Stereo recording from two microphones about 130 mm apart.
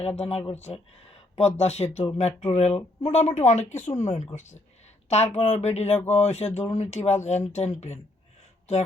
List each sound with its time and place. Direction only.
0.2 s speech: 50° left (ahead or behind)